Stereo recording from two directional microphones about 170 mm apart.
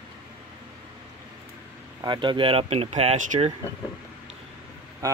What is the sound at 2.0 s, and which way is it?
Speech, 25° right (ahead or behind).